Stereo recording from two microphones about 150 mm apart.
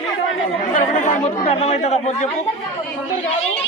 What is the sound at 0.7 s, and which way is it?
Speech, 55° left (ahead or behind).